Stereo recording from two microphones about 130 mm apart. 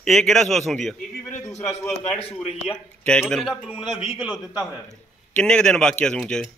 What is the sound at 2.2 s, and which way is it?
Speech, 50° left (ahead or behind).